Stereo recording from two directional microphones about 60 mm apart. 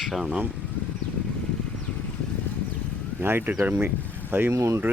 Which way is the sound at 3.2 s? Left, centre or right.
Right.